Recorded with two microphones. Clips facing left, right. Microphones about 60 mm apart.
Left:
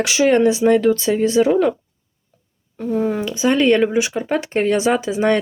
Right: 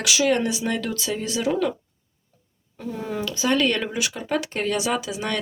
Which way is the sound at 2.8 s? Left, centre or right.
Centre.